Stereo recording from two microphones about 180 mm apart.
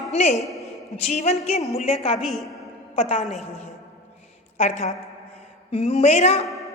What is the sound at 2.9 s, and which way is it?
Speech, 35° left (ahead or behind).